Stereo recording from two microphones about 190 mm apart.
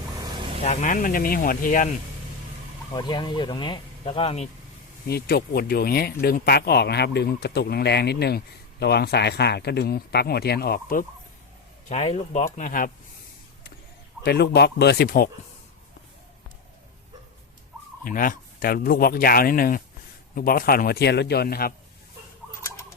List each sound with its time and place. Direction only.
0.6 s speech: 40° left (ahead or behind)
2.9 s speech: 25° left (ahead or behind)
5.0 s speech: 55° left (ahead or behind)
11.9 s speech: 35° left (ahead or behind)
14.3 s speech: 55° left (ahead or behind)
18.0 s speech: 45° left (ahead or behind)